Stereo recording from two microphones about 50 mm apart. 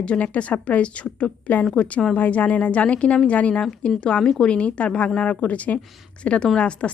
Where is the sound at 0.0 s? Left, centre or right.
Left.